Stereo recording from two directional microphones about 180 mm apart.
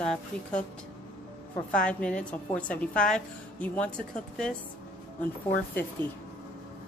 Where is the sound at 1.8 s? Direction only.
5° left (ahead or behind).